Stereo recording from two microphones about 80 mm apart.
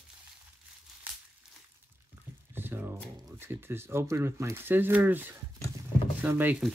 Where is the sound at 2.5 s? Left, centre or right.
Right.